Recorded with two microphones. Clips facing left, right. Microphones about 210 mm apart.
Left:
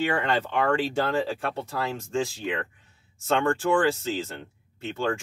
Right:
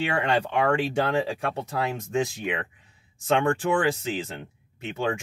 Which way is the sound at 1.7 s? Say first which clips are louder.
Right 2 dB; 15° right (ahead or behind).